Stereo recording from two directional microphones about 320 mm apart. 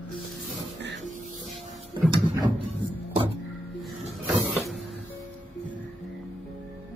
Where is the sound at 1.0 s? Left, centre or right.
Right.